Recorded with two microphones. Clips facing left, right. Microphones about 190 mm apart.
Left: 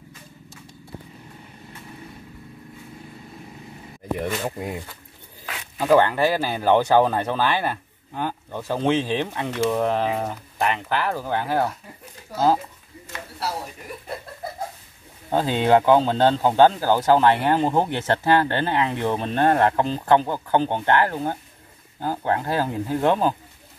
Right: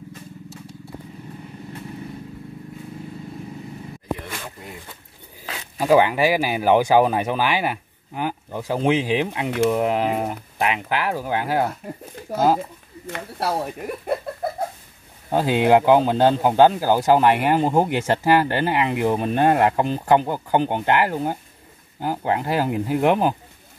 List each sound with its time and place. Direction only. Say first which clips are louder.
4.5 s speech: left 9 dB; 55° left (ahead or behind)
5.5 s speech: right 1 dB; 15° right (ahead or behind)
13.0 s speech: right 5 dB; 55° right (ahead or behind)
15.3 s speech: right 2 dB; 10° right (ahead or behind)